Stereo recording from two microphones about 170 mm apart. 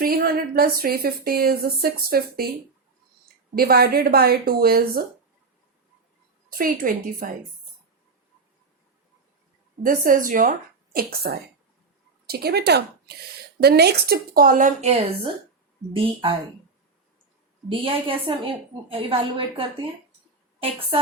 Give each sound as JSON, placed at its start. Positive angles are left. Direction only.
{"t": 0.0, "sound": "a woman's voice", "side_deg": -60}
{"t": 3.5, "sound": "a woman's voice", "side_deg": -65}
{"t": 6.5, "sound": "a woman's voice", "side_deg": -55}
{"t": 9.8, "sound": "a woman's voice", "side_deg": -55}
{"t": 10.9, "sound": "a woman's voice", "side_deg": -65}
{"t": 17.7, "sound": "a woman's voice", "side_deg": -30}